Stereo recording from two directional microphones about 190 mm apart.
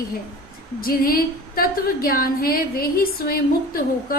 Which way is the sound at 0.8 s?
50° left (ahead or behind).